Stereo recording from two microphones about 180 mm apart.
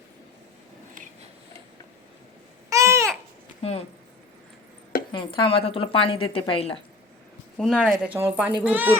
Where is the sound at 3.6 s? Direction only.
35° left (ahead or behind).